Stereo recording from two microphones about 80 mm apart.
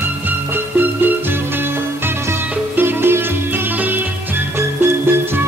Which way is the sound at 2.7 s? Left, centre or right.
Right.